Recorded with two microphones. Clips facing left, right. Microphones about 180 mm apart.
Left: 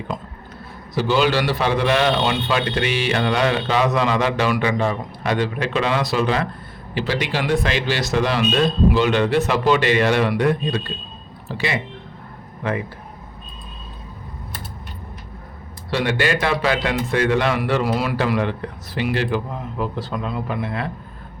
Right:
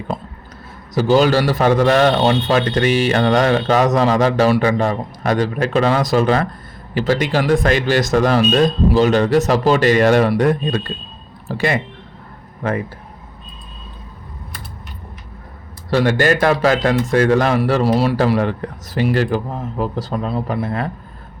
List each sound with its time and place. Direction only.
0.9 s a man's voice: 40° right (ahead or behind)
15.9 s a man's voice: 45° right (ahead or behind)